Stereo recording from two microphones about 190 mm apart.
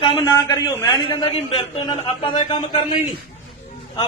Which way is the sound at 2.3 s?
40° left (ahead or behind).